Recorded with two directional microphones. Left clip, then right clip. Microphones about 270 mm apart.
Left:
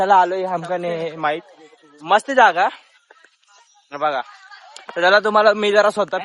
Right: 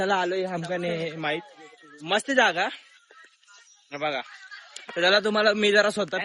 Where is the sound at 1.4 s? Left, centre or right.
Left.